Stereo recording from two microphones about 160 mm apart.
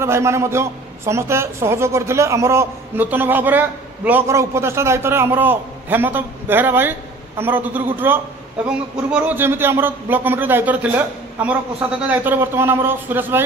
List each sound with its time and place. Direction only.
0.0 s a man's voice: 15° right (ahead or behind)
12.1 s a man's voice: 15° right (ahead or behind)